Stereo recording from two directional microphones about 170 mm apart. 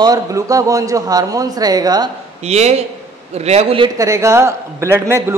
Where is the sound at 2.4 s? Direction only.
40° right (ahead or behind).